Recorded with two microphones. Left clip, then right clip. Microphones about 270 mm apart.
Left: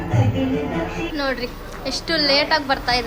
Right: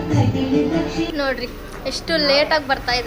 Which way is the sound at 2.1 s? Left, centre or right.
Centre.